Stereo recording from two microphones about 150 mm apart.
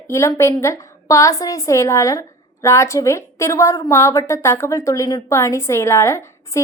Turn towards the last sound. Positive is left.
turn(degrees=20)  # may be behind; listen again after turning